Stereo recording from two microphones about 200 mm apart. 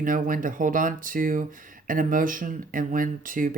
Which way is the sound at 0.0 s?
45° right (ahead or behind).